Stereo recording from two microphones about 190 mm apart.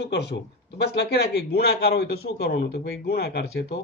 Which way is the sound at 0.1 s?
65° left (ahead or behind).